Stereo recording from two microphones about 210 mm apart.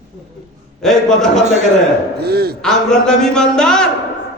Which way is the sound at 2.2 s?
50° right (ahead or behind).